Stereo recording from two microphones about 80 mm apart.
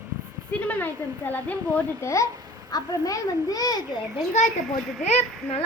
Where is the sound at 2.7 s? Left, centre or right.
Left.